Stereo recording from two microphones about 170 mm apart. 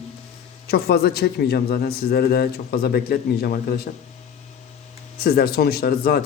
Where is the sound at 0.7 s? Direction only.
65° left (ahead or behind).